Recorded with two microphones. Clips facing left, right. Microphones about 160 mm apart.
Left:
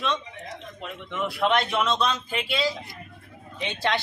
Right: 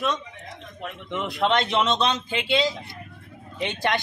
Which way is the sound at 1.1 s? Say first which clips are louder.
Right 1 dB; 20° right (ahead or behind).